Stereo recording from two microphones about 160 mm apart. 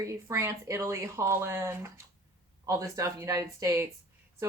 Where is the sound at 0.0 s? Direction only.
20° right (ahead or behind).